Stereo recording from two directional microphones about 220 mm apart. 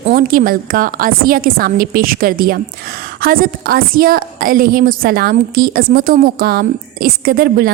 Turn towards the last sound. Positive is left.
turn(degrees=-45)  # may be behind; listen again after turning